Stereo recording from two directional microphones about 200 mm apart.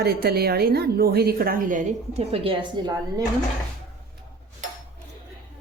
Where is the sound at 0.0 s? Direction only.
50° right (ahead or behind); by 3.2 s 20° right (ahead or behind).